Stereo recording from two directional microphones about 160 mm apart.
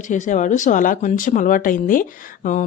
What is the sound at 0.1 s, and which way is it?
Speech, 50° left (ahead or behind).